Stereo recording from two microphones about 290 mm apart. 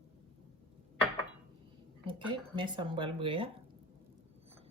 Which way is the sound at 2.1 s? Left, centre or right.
Centre.